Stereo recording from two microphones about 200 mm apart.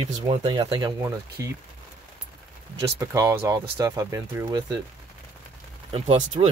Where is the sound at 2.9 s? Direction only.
15° right (ahead or behind).